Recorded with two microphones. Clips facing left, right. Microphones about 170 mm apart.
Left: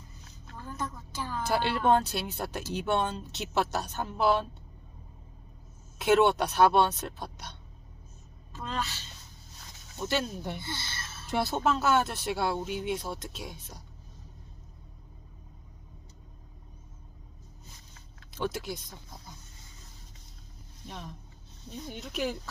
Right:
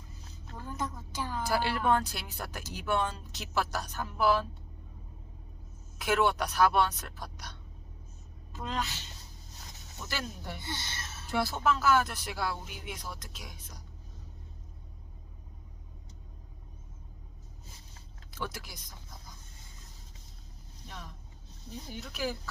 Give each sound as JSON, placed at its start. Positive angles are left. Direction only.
{"t": 0.5, "sound": "a sound", "side_deg": -15}
{"t": 1.5, "sound": "speech", "side_deg": 25}
{"t": 6.0, "sound": "speech", "side_deg": 25}
{"t": 8.5, "sound": "a woman's voice", "side_deg": -15}
{"t": 10.0, "sound": "speech", "side_deg": 25}
{"t": 10.6, "sound": "speech", "side_deg": -15}
{"t": 11.3, "sound": "speech", "side_deg": 25}
{"t": 18.3, "sound": "speech", "side_deg": 25}
{"t": 20.8, "sound": "speech", "side_deg": 20}